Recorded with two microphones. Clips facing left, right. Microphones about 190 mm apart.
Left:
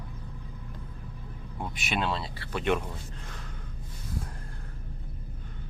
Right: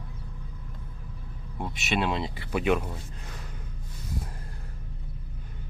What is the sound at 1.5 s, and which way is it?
Speech, centre (ahead or behind).